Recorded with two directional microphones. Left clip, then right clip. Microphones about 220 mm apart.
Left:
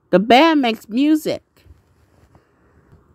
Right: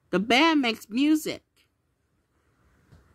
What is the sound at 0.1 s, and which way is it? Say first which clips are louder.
Speech: left 9 dB; 15° left (ahead or behind).